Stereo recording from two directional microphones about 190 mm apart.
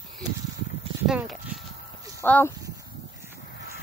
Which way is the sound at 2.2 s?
10° left (ahead or behind).